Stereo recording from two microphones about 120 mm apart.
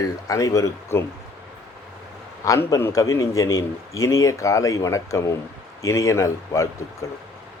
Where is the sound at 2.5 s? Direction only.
25° left (ahead or behind).